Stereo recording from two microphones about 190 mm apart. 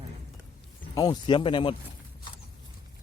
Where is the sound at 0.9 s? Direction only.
20° left (ahead or behind).